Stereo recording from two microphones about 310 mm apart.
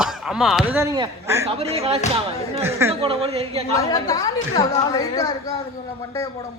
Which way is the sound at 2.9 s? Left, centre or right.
Centre.